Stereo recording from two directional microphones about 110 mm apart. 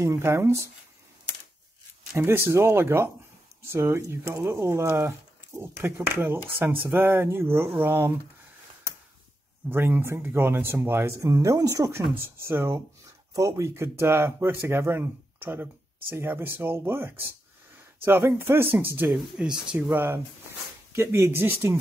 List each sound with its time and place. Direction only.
0.0 s speech: 25° right (ahead or behind)
2.1 s speech: 20° right (ahead or behind)
9.7 s speech: 20° right (ahead or behind)
12.1 s speech: 20° right (ahead or behind)
19.1 s speech: 5° right (ahead or behind)
20.9 s speech: 25° right (ahead or behind)